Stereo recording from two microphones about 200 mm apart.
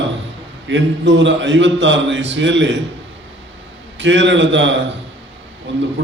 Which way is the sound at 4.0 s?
65° right (ahead or behind).